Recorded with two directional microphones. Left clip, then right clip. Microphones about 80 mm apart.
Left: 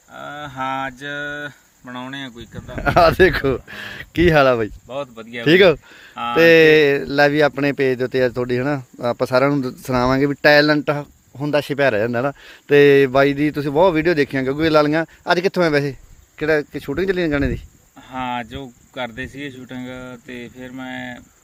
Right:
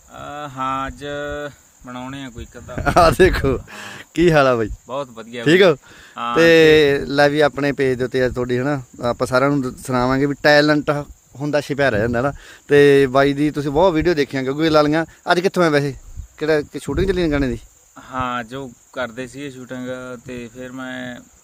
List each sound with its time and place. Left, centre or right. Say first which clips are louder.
0.1 s mantra: right 1 dB; centre
1.8 s speech: left 1 dB; centre
2.7 s speech: even; right
3.7 s speech: left 2 dB; centre; by 5.5 s right
5.5 s speech: left 1 dB; right
9.8 s speech: left 1 dB; centre
10.4 s speech: even; centre
10.8 s speech: right 1 dB; right
15.4 s speech: right 1 dB; right
18.1 s speech: right 2 dB; right